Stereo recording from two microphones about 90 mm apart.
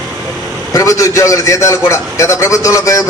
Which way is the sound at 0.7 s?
40° left (ahead or behind).